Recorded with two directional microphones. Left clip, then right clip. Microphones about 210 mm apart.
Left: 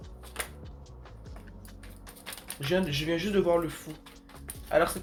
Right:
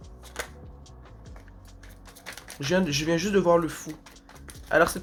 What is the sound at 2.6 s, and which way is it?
Speech, 40° right (ahead or behind).